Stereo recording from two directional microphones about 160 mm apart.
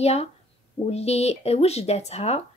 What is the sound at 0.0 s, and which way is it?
Speech, 40° left (ahead or behind).